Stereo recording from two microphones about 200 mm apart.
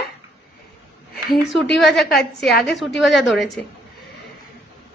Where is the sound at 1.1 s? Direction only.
Centre (ahead or behind).